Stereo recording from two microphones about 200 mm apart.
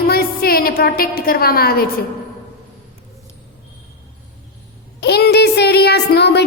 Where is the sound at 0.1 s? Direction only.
50° left (ahead or behind).